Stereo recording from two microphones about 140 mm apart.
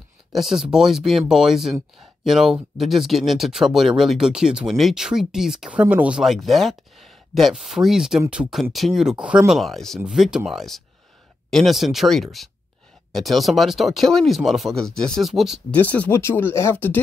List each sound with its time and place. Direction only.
0.3 s speech: 5° right (ahead or behind)
15.7 s speech: 10° left (ahead or behind)